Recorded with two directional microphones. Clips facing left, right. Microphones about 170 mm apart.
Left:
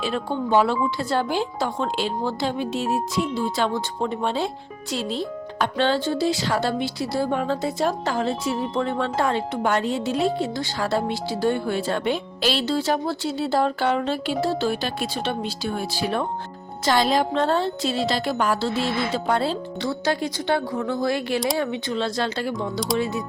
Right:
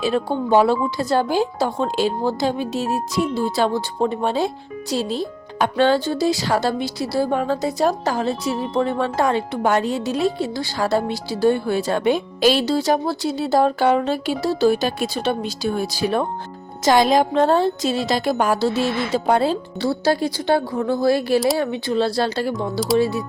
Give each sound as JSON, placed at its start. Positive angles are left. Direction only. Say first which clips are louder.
{"t": 0.7, "sound": "a woman's voice", "louder": "right 4 dB", "side_deg": -40}
{"t": 22.5, "sound": "speech", "louder": "right 4 dB", "side_deg": 0}
{"t": 23.0, "sound": "a woman's voice", "louder": "right 8 dB", "side_deg": -35}